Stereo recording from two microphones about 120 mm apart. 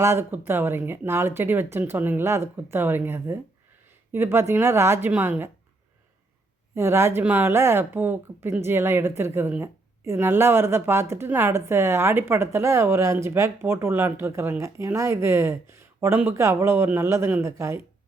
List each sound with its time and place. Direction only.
0.0 s speech: 20° right (ahead or behind)
6.7 s speech: 20° right (ahead or behind)